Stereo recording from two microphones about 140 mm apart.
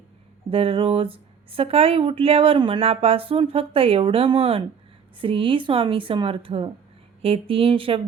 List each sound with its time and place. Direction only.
0.5 s speech: 40° right (ahead or behind)